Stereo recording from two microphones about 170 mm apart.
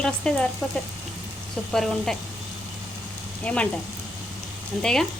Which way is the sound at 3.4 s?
5° left (ahead or behind).